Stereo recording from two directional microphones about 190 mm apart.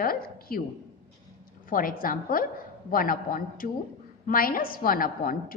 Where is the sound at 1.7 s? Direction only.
50° left (ahead or behind).